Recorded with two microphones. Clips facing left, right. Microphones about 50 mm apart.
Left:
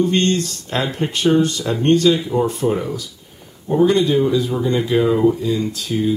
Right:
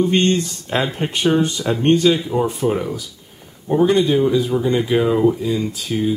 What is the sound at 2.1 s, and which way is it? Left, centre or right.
Speech, centre.